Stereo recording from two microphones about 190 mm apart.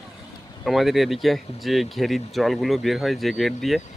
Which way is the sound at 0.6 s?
Centre (ahead or behind).